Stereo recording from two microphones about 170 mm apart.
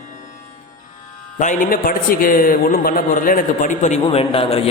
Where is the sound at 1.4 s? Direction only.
50° left (ahead or behind).